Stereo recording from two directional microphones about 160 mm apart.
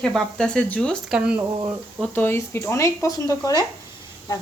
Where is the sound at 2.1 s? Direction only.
15° left (ahead or behind).